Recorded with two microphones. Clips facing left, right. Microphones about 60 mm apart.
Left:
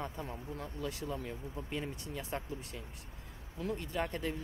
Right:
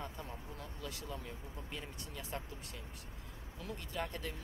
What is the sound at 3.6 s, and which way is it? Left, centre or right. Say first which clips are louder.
Speech: left 6 dB; left.